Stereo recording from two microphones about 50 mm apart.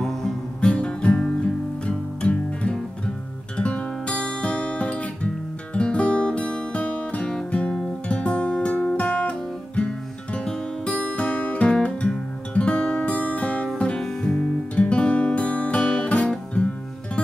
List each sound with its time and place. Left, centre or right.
0.0 s music: centre
0.6 s music: left